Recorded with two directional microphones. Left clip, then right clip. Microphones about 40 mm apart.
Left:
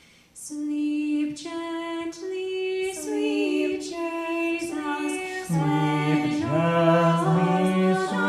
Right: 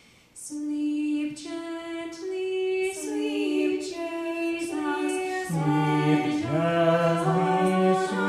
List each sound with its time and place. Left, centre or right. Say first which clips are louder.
2.5 s female singing: right 2 dB; left
5.1 s music: right 1 dB; centre
5.7 s music: right 1 dB; left
7.6 s a capella: right 1 dB; centre